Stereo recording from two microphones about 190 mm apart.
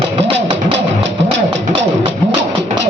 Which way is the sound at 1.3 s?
70° right (ahead or behind).